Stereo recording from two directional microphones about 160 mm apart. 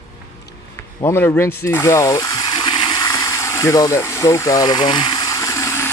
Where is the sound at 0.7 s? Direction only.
15° left (ahead or behind).